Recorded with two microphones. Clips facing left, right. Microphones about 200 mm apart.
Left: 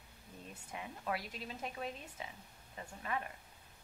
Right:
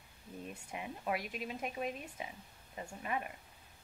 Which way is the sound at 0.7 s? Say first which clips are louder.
Right 2 dB; 20° right (ahead or behind).